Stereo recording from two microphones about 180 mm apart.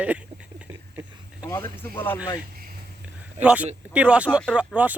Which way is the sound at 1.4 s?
15° left (ahead or behind).